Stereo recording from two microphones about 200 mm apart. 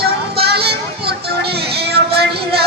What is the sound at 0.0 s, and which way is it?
Music, 55° right (ahead or behind).